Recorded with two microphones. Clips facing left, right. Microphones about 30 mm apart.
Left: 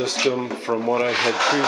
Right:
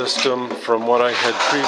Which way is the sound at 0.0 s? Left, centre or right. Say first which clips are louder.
Right 2 dB; right.